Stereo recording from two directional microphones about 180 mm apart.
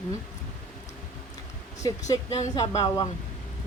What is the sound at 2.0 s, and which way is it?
Speech, 20° left (ahead or behind).